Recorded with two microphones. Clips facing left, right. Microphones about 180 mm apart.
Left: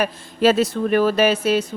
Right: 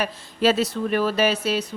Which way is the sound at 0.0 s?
50° left (ahead or behind).